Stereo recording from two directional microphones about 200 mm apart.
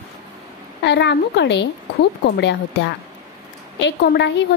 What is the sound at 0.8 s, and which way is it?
Speech, 60° left (ahead or behind).